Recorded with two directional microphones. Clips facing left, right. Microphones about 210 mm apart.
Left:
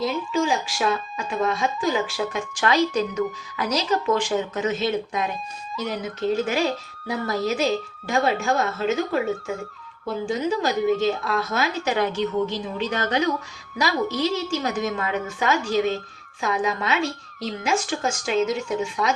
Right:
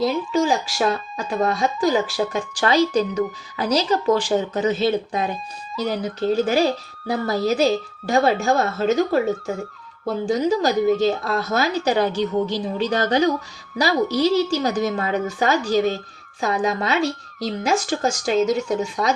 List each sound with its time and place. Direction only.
0.0 s speech: 35° right (ahead or behind)